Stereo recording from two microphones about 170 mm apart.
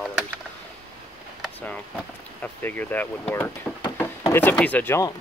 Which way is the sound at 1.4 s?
10° left (ahead or behind).